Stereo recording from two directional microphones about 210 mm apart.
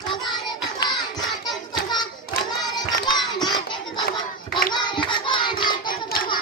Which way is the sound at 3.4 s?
20° left (ahead or behind).